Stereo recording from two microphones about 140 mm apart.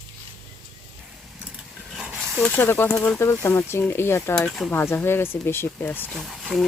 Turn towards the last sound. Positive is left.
turn(degrees=0)  # may be behind; listen again after turning